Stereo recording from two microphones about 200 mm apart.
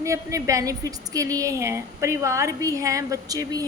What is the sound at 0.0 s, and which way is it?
A woman's voice, 15° right (ahead or behind).